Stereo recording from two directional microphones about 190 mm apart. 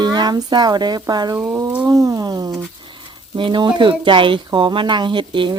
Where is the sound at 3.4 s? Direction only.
25° right (ahead or behind).